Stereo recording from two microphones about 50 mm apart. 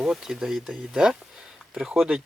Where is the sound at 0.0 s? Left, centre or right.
Centre.